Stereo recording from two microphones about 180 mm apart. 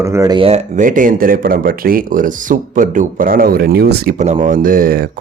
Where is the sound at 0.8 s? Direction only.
50° right (ahead or behind); by 4.1 s 65° right (ahead or behind).